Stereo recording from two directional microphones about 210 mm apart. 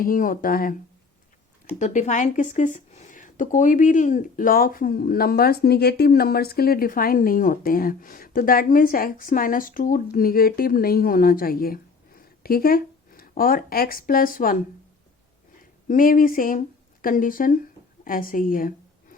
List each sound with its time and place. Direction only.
0.0 s speech: 40° left (ahead or behind)
1.8 s a woman's voice: 35° left (ahead or behind)
15.9 s a woman's voice: 40° left (ahead or behind)